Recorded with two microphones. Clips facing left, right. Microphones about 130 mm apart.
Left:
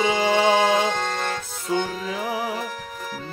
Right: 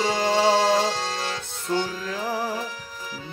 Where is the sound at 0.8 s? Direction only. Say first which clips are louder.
Left 2 dB; 55° left (ahead or behind).